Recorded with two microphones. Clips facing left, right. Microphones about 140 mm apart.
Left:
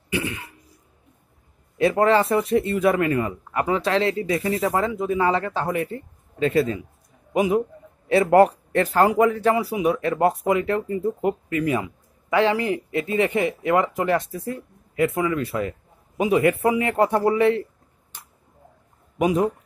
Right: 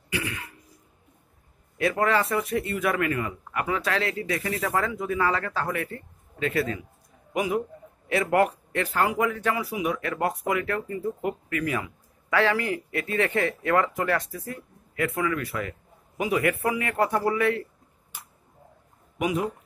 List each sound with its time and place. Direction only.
0.1 s speech: 25° left (ahead or behind)
1.8 s speech: 25° left (ahead or behind)
19.1 s speech: 35° left (ahead or behind)